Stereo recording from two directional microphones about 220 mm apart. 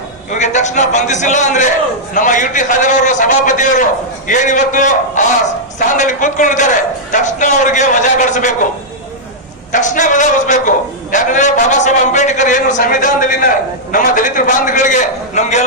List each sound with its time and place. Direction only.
0.3 s a man's voice: 35° left (ahead or behind)
9.7 s a man's voice: 35° left (ahead or behind)